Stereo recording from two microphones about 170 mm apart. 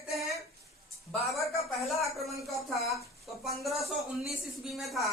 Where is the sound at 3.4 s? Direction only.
Centre (ahead or behind).